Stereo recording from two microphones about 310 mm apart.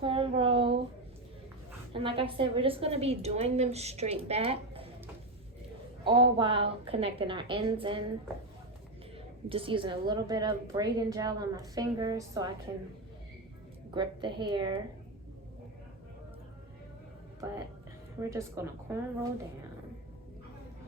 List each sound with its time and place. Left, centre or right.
0.0 s a sound: centre
1.9 s a woman's voice: centre
6.1 s a woman's voice: centre
9.1 s a woman's voice: centre
13.9 s a woman's voice: centre
18.2 s a woman's voice: centre